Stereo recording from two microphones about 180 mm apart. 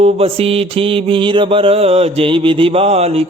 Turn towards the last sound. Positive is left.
turn(degrees=-35)  # may be behind; listen again after turning